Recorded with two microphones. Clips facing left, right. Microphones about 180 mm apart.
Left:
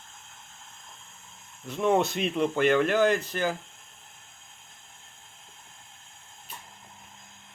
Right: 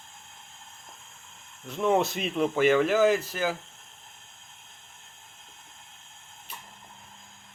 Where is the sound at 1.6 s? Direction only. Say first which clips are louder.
Even; centre (ahead or behind).